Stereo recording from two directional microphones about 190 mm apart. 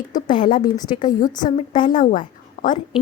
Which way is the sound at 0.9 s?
45° left (ahead or behind).